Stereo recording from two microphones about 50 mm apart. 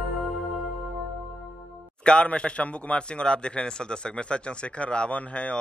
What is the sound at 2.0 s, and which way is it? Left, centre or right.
A man's voice, left.